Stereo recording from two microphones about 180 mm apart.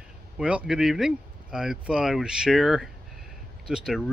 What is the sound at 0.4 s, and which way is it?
Speech, 5° right (ahead or behind).